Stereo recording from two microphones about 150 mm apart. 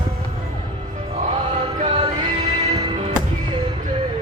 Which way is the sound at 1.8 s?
30° right (ahead or behind).